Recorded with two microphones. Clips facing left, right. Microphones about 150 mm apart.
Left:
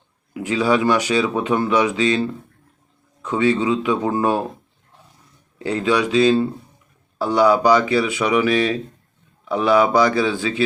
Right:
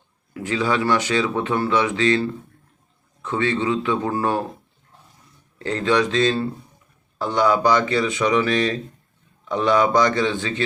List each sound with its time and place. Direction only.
0.3 s speech: 15° left (ahead or behind)
5.5 s speech: 10° left (ahead or behind)